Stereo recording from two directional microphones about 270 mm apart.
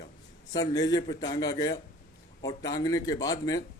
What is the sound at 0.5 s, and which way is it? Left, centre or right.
A man's voice, centre.